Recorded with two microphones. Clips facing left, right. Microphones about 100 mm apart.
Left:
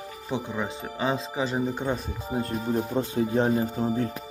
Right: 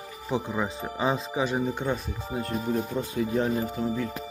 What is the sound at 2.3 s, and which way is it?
Speech, 30° left (ahead or behind).